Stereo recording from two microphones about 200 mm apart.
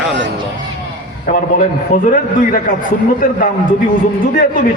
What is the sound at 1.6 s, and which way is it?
A man's voice, 40° left (ahead or behind).